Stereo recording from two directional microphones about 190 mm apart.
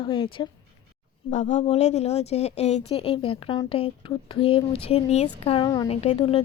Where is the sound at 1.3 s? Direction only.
40° left (ahead or behind); by 5.8 s 20° left (ahead or behind).